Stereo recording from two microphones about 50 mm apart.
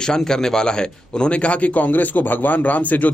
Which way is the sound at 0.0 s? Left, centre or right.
Centre.